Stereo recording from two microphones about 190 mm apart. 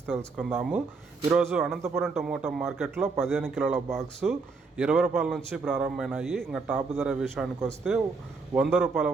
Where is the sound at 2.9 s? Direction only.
10° right (ahead or behind).